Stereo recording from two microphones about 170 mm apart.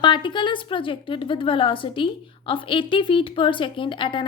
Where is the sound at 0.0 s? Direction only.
30° left (ahead or behind).